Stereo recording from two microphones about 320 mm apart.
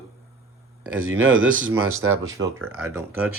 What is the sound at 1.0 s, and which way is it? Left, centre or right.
Speech, right.